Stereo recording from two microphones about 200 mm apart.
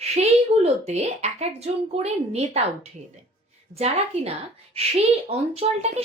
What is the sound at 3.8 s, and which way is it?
Speech, 30° right (ahead or behind).